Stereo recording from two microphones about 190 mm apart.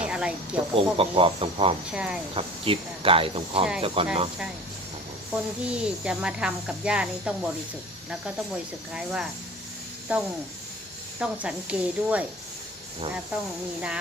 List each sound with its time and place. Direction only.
0.0 s a sound: 5° right (ahead or behind)
0.5 s speech: 30° right (ahead or behind)
1.9 s speech: 5° right (ahead or behind)
2.3 s speech: 30° right (ahead or behind)
5.3 s speech: 5° right (ahead or behind)
8.9 s speech: 5° right (ahead or behind)